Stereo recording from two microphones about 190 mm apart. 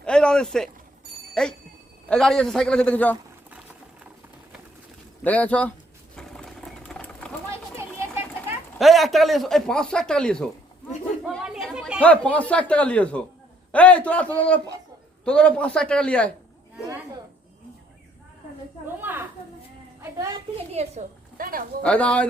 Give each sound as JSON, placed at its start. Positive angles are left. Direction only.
{"t": 0.0, "sound": "a sound", "side_deg": 5}
{"t": 1.3, "sound": "speech", "side_deg": 5}
{"t": 5.2, "sound": "speech", "side_deg": 10}
{"t": 6.1, "sound": "sewing machine", "side_deg": 5}
{"t": 7.5, "sound": "children playing", "side_deg": -15}
{"t": 8.8, "sound": "speech", "side_deg": 0}
{"t": 11.3, "sound": "chatter", "side_deg": -5}
{"t": 11.9, "sound": "speech", "side_deg": 5}
{"t": 18.9, "sound": "a sound", "side_deg": -10}
{"t": 20.0, "sound": "a woman's voice", "side_deg": -15}
{"t": 20.7, "sound": "a woman's voice", "side_deg": -40}
{"t": 21.8, "sound": "speech", "side_deg": 5}